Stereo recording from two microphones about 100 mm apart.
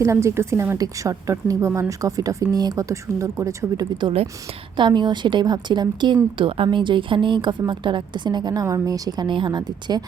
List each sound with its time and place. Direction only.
0.0 s a woman's voice: 30° right (ahead or behind)
4.8 s a woman's voice: 50° right (ahead or behind)
6.3 s a woman's voice: 60° right (ahead or behind); by 10.0 s 45° right (ahead or behind)